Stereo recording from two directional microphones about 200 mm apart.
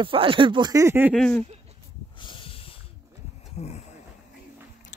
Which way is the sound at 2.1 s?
25° left (ahead or behind).